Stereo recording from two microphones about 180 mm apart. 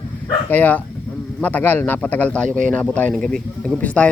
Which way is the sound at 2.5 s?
45° right (ahead or behind).